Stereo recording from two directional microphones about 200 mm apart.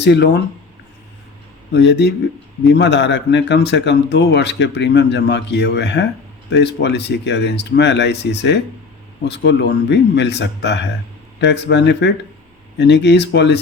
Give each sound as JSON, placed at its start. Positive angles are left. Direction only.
{"t": 0.0, "sound": "speech", "side_deg": 60}
{"t": 1.7, "sound": "speech", "side_deg": 60}